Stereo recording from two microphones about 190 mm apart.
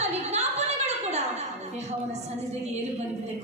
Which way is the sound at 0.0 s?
35° right (ahead or behind).